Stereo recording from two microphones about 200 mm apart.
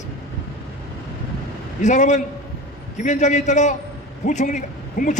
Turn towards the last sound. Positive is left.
turn(degrees=35)  # may be behind; listen again after turning